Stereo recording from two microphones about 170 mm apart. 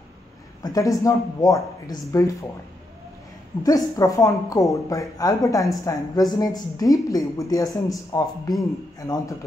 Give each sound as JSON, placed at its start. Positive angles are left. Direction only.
{"t": 0.7, "sound": "speech", "side_deg": 20}
{"t": 3.6, "sound": "speech", "side_deg": 20}